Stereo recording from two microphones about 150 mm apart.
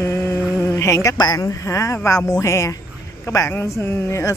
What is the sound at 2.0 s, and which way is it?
Speech, 20° left (ahead or behind).